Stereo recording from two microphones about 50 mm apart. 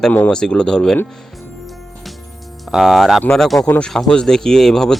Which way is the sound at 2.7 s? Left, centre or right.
Centre.